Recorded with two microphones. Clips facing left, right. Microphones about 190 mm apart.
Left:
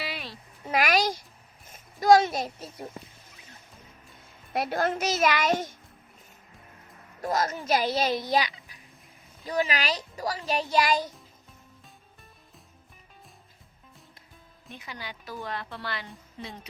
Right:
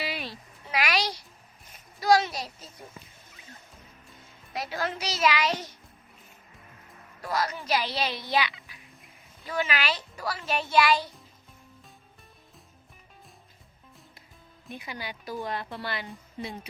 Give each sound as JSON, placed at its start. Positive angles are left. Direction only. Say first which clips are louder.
{"t": 0.0, "sound": "a sound", "louder": "right 2 dB", "side_deg": 0}
{"t": 0.6, "sound": "a sound", "louder": "left 4 dB", "side_deg": 45}
{"t": 2.0, "sound": "a woman's voice", "louder": "left 4 dB", "side_deg": 50}
{"t": 4.5, "sound": "a woman's voice", "louder": "left 5 dB", "side_deg": 55}
{"t": 7.2, "sound": "a woman's voice", "louder": "left 2 dB", "side_deg": 45}
{"t": 14.7, "sound": "speech", "louder": "right 3 dB", "side_deg": -15}